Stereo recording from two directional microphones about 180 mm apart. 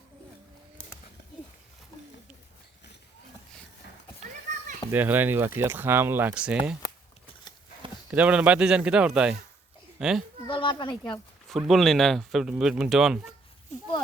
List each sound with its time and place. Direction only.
4.2 s children playing: 45° right (ahead or behind)
4.9 s speech: 10° right (ahead or behind)
8.1 s speech: 10° right (ahead or behind)
10.4 s speech: 30° left (ahead or behind)
11.4 s speech: centre (ahead or behind)